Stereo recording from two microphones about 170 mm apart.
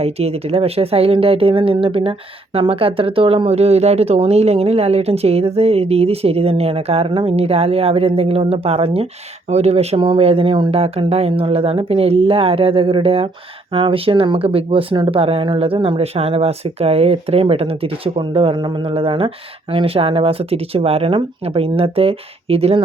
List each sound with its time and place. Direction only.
0.0 s speech: 35° right (ahead or behind)